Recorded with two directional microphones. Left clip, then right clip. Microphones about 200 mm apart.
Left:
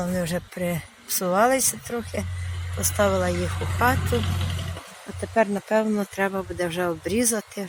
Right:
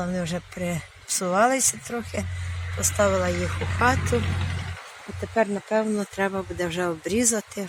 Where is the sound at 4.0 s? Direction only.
60° left (ahead or behind).